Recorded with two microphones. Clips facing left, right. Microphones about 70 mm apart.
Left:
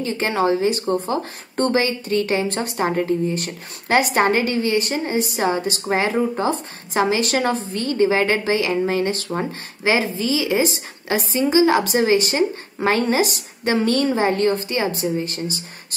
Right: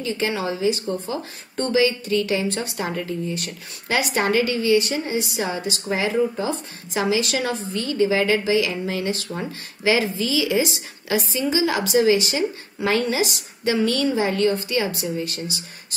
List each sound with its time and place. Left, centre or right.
0.0 s a woman's voice: left